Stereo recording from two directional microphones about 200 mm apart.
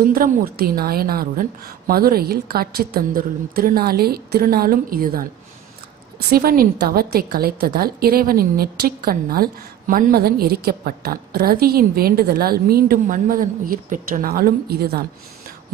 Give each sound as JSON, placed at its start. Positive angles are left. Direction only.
{"t": 0.1, "sound": "a woman's voice", "side_deg": -45}
{"t": 6.3, "sound": "a woman's voice", "side_deg": -50}